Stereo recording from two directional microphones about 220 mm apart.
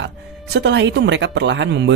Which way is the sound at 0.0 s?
50° right (ahead or behind).